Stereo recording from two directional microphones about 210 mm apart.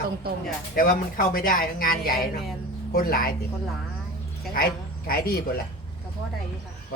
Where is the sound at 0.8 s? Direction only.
45° left (ahead or behind).